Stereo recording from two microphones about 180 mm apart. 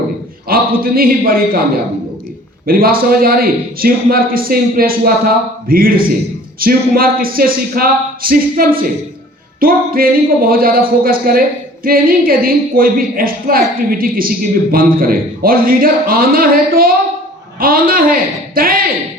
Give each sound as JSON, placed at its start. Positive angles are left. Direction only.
{"t": 0.4, "sound": "speech", "side_deg": -55}
{"t": 2.6, "sound": "a man's voice", "side_deg": -55}